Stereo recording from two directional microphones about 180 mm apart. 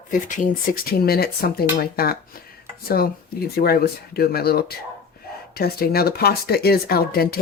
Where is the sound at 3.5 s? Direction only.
60° left (ahead or behind).